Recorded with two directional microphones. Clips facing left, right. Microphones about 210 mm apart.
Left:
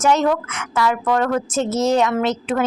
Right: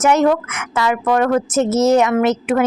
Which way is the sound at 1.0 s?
15° right (ahead or behind).